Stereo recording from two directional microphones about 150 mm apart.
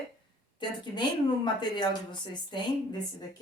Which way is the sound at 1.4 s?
30° left (ahead or behind).